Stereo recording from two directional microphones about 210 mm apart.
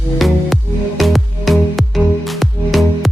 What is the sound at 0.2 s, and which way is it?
Music, centre (ahead or behind).